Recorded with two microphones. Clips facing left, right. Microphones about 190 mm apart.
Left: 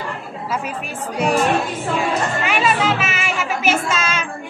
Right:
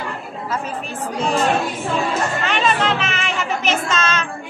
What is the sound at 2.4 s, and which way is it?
Music, 5° left (ahead or behind).